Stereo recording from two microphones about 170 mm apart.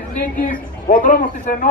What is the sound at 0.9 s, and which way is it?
Speech, 50° left (ahead or behind).